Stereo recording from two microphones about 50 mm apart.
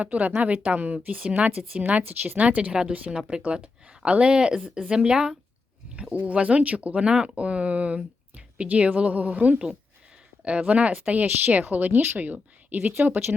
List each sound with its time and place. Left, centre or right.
0.0 s a woman's voice: right
2.4 s speech: right
3.1 s speech: centre
6.0 s a woman's voice: right